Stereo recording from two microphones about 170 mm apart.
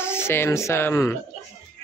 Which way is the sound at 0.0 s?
15° left (ahead or behind).